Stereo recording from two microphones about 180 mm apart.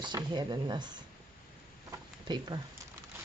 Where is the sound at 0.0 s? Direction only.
25° right (ahead or behind).